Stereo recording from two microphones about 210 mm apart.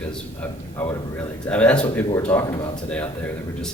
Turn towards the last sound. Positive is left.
turn(degrees=5)  # may be behind; listen again after turning